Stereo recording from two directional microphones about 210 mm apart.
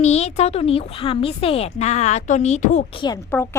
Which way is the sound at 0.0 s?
30° left (ahead or behind).